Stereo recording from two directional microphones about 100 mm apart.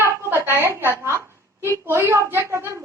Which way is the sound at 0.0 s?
25° right (ahead or behind).